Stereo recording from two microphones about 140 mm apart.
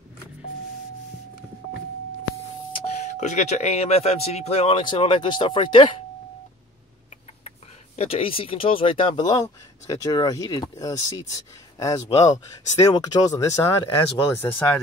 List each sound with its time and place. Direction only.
3.0 s speech: 60° left (ahead or behind); by 6.0 s 35° left (ahead or behind)
7.4 s speech: 50° left (ahead or behind); by 14.8 s 20° left (ahead or behind)